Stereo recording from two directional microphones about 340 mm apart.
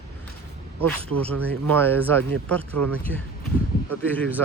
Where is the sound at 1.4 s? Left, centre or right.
Centre.